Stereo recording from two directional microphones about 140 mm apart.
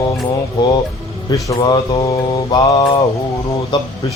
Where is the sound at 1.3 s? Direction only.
30° left (ahead or behind).